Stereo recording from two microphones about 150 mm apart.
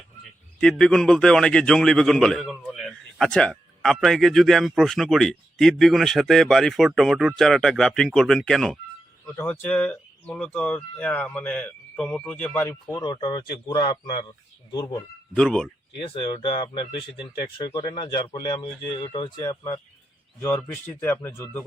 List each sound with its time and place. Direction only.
0.6 s a man's voice: 5° left (ahead or behind)
9.2 s speech: 15° left (ahead or behind)
12.8 s speech: 25° left (ahead or behind)
15.4 s a man's voice: 5° left (ahead or behind)
16.0 s speech: 30° left (ahead or behind)
19.4 s speech: 20° left (ahead or behind)